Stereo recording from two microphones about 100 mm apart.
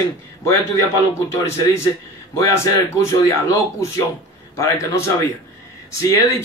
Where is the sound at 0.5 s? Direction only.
30° left (ahead or behind).